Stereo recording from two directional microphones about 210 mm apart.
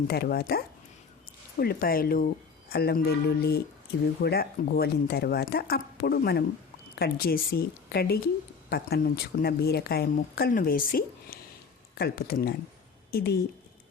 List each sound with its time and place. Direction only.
0.1 s speech: 50° left (ahead or behind)